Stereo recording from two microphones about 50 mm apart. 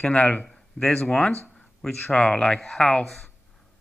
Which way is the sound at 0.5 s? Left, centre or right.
Centre.